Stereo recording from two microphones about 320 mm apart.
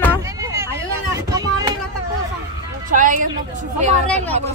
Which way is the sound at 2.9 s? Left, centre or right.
Right.